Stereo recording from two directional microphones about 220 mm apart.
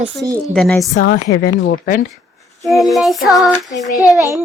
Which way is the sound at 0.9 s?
45° left (ahead or behind).